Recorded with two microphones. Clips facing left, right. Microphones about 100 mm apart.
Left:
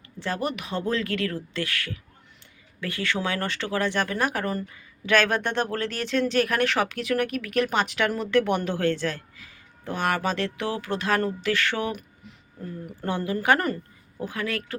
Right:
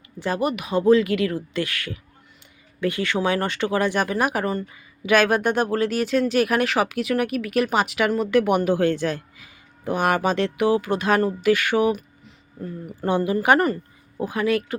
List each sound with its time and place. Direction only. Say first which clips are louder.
0.2 s speech: right 5 dB; 15° right (ahead or behind)
13.0 s speech: right 6 dB; 15° right (ahead or behind)